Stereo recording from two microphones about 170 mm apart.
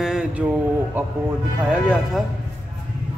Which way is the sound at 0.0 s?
5° right (ahead or behind).